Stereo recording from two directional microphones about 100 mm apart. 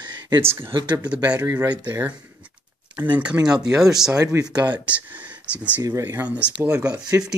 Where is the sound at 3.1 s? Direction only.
15° right (ahead or behind).